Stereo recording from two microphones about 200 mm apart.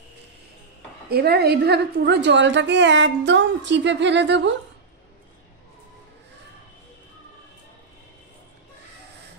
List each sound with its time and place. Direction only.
1.0 s a woman's voice: 50° right (ahead or behind)